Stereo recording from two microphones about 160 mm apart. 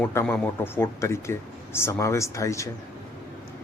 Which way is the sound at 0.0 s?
15° left (ahead or behind).